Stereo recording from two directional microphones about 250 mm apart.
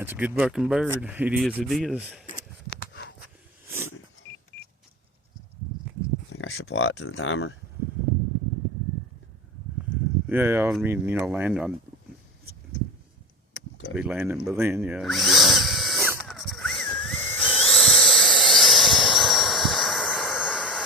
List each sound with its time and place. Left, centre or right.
0.0 s speech: centre
2.6 s a sound: left
3.7 s a sound: centre
6.3 s speech: left
10.2 s speech: centre
13.9 s drill: centre